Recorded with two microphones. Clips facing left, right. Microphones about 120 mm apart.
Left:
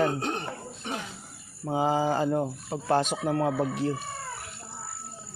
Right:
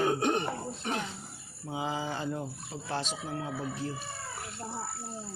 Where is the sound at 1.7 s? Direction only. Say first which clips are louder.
Left 9 dB; 40° left (ahead or behind); by 3.9 s 70° left (ahead or behind).